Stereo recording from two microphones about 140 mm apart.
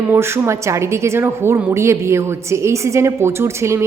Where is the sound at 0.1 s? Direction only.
20° right (ahead or behind).